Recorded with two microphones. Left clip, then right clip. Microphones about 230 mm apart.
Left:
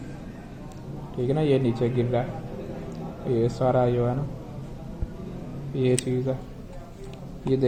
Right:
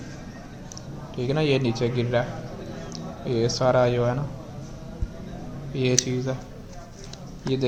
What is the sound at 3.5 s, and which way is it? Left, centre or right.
Speech, right.